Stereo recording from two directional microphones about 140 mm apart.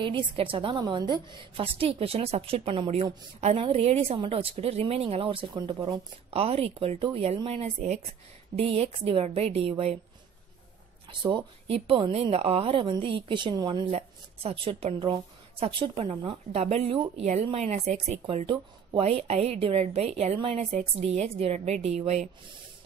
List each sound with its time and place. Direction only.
0.0 s a woman's voice: 40° right (ahead or behind)
11.1 s a woman's voice: 35° right (ahead or behind)
13.8 s a woman's voice: 45° right (ahead or behind)